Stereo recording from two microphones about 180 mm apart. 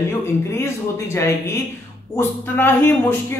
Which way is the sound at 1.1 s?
15° left (ahead or behind).